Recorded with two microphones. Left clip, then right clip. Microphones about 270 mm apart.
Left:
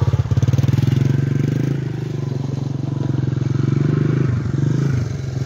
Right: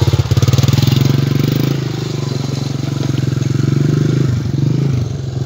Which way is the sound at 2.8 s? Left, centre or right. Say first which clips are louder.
Right 3 dB; right.